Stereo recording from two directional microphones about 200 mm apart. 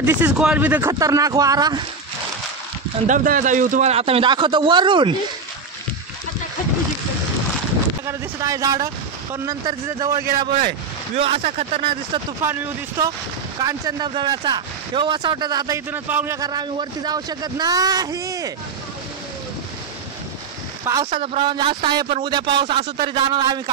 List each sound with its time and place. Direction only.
0.0 s speech: 5° right (ahead or behind)
3.1 s speech: 40° right (ahead or behind); by 5.1 s 25° right (ahead or behind)
8.1 s speech: 15° right (ahead or behind)
11.1 s speech: 30° right (ahead or behind)
12.4 s speech: 15° right (ahead or behind)
20.8 s speech: 20° right (ahead or behind)